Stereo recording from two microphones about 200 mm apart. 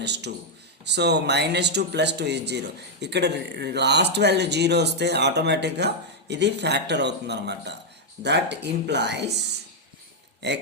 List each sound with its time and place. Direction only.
0.0 s speech: 60° right (ahead or behind)
10.4 s speech: 60° right (ahead or behind)